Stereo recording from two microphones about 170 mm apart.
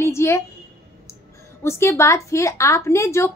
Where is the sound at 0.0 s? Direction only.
15° left (ahead or behind).